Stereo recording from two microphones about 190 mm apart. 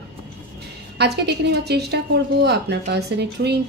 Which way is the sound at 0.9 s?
60° right (ahead or behind).